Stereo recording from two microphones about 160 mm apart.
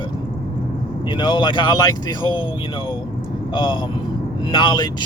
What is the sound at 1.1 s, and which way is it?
Speech, 30° left (ahead or behind).